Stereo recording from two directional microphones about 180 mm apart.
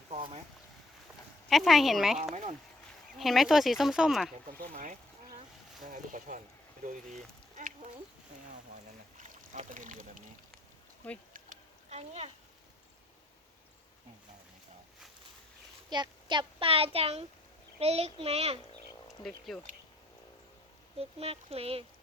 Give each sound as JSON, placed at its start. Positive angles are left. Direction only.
{"t": 0.1, "sound": "a sound", "side_deg": -35}
{"t": 1.5, "sound": "speech", "side_deg": 0}
{"t": 4.7, "sound": "boat", "side_deg": -45}
{"t": 5.8, "sound": "speech", "side_deg": -45}
{"t": 7.1, "sound": "a sound", "side_deg": -45}
{"t": 9.1, "sound": "speech", "side_deg": -45}
{"t": 11.0, "sound": "speech", "side_deg": 10}
{"t": 11.3, "sound": "a sound", "side_deg": -40}
{"t": 15.9, "sound": "a child's voice", "side_deg": -25}
{"t": 19.5, "sound": "speech", "side_deg": 5}
{"t": 21.0, "sound": "a child's voice", "side_deg": -35}